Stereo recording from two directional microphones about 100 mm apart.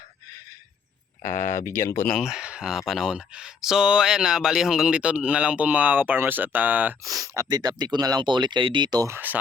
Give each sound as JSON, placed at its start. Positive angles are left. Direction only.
{"t": 1.6, "sound": "speech", "side_deg": 25}
{"t": 2.1, "sound": "speech", "side_deg": -5}
{"t": 7.0, "sound": "speech", "side_deg": -35}
{"t": 9.0, "sound": "speech", "side_deg": -20}